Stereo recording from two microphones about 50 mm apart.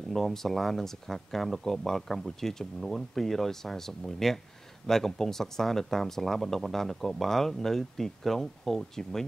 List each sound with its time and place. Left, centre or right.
0.1 s speech: centre